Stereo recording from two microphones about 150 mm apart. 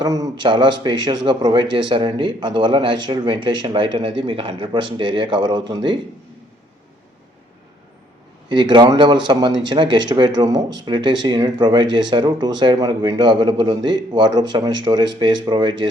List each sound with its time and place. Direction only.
0.0 s speech: 25° right (ahead or behind)
8.4 s speech: 30° right (ahead or behind)